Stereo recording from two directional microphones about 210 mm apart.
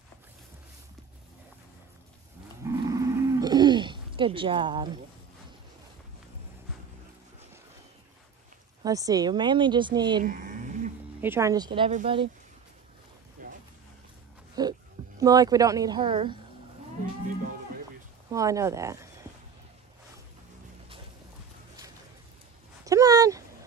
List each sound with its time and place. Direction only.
2.6 s livestock: 15° right (ahead or behind)
8.8 s a woman's voice: 15° right (ahead or behind)
10.2 s a sound: 40° right (ahead or behind)
11.1 s speech: 10° right (ahead or behind); by 12.3 s 30° right (ahead or behind)
14.5 s dog: 20° right (ahead or behind)
18.3 s speech: 15° right (ahead or behind)
22.8 s a sound: 15° right (ahead or behind)